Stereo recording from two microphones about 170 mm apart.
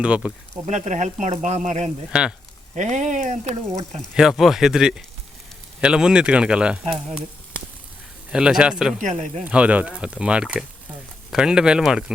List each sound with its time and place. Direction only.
0.0 s speech: 5° right (ahead or behind)
0.7 s speech: 45° right (ahead or behind)
4.1 s speech: 5° right (ahead or behind)
8.3 s speech: 5° right (ahead or behind)
9.0 s speech: 45° right (ahead or behind)
9.4 s speech: 5° right (ahead or behind)